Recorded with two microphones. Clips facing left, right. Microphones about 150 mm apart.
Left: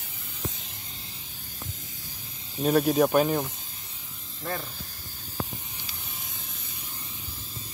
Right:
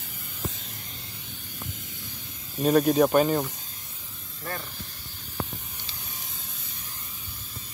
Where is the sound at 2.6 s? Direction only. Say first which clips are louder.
Right 2 dB; 5° left (ahead or behind).